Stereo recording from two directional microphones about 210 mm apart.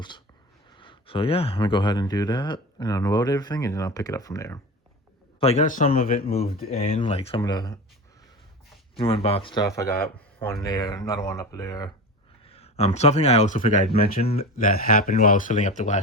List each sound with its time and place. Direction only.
0.7 s speech: 25° left (ahead or behind)
5.4 s speech: 30° left (ahead or behind)
6.6 s speech: 30° left (ahead or behind)
9.0 s speech: 25° left (ahead or behind)
12.5 s speech: 30° left (ahead or behind)
14.3 s speech: 45° left (ahead or behind)